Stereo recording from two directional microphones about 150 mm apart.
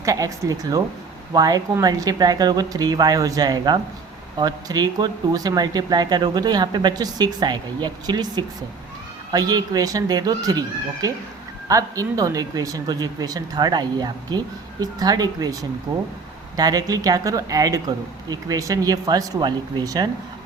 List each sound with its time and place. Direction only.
0.0 s speech: 20° right (ahead or behind)
16.6 s speech: 25° right (ahead or behind)